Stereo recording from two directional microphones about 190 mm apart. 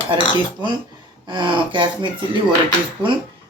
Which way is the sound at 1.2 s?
25° right (ahead or behind).